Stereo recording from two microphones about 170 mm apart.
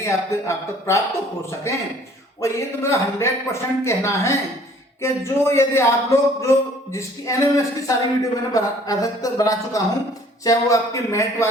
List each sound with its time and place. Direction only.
0.0 s speech: 15° left (ahead or behind)